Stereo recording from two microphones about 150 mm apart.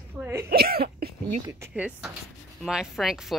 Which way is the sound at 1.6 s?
10° right (ahead or behind).